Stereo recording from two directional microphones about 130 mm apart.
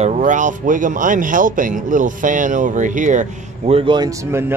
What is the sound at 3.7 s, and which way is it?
Speech, 35° right (ahead or behind).